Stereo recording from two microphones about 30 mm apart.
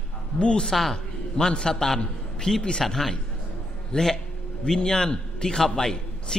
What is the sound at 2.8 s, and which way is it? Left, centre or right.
A man's voice, centre.